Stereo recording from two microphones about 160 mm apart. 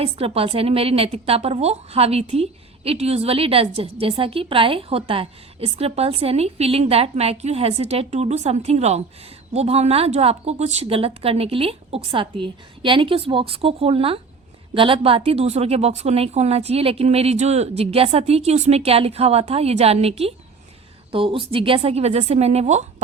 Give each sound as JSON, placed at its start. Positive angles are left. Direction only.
{"t": 0.0, "sound": "a woman's voice", "side_deg": -40}